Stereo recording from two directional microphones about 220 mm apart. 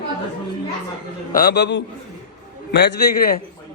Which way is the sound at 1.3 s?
45° left (ahead or behind).